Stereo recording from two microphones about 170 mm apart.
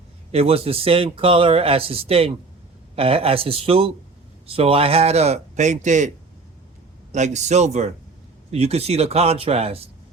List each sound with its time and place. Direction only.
0.3 s speech: 35° right (ahead or behind)
7.1 s speech: 45° right (ahead or behind)